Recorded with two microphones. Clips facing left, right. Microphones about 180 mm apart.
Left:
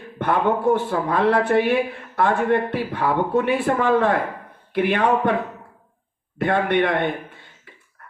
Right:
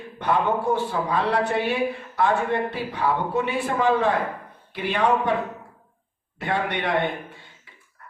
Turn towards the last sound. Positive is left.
turn(degrees=55)  # may be behind; listen again after turning